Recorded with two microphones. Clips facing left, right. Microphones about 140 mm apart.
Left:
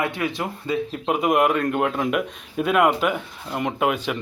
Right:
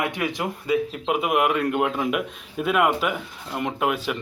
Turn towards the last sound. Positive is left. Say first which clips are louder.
# left 2 dB
turn(degrees=0)  # may be behind; listen again after turning